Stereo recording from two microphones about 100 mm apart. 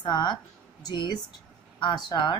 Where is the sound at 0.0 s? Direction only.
50° left (ahead or behind).